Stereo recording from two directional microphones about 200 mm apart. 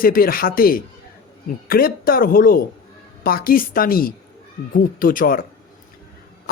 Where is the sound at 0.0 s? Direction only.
45° left (ahead or behind).